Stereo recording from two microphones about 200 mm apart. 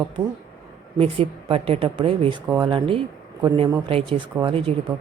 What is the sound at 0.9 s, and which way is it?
Speech, 30° right (ahead or behind).